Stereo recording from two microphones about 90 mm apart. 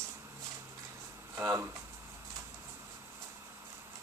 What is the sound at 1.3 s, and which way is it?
Speech, 30° right (ahead or behind).